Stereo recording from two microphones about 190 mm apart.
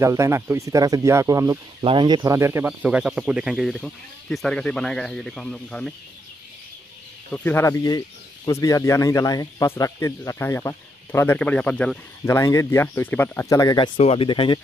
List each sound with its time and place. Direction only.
0.0 s speech: 15° right (ahead or behind)
1.8 s speech: 25° right (ahead or behind); by 5.9 s 5° left (ahead or behind)
7.3 s speech: 10° left (ahead or behind)